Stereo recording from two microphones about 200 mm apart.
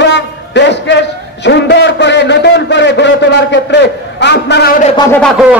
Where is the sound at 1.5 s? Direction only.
60° left (ahead or behind).